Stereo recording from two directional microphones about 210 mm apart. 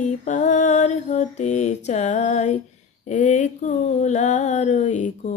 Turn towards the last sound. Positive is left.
turn(degrees=35)  # may be behind; listen again after turning